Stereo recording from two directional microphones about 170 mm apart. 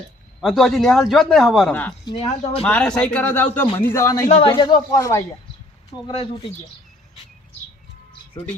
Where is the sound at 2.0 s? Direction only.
30° left (ahead or behind).